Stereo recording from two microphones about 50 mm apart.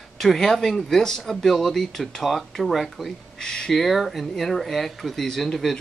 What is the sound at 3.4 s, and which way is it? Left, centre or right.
Speech, centre.